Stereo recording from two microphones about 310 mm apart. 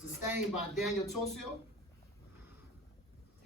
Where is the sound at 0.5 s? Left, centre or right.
Centre.